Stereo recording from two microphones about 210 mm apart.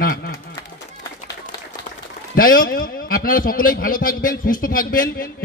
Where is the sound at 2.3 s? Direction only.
40° left (ahead or behind).